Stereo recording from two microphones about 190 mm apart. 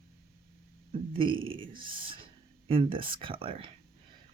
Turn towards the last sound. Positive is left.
turn(degrees=-30)  # may be behind; listen again after turning